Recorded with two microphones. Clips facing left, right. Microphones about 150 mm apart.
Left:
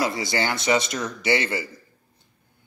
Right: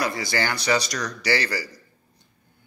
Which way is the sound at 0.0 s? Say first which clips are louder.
Left 1 dB; 25° left (ahead or behind).